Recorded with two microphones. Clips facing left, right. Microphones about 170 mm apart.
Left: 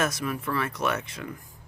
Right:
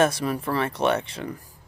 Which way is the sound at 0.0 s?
30° right (ahead or behind).